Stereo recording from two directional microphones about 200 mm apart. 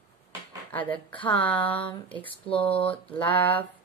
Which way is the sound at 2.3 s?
25° left (ahead or behind).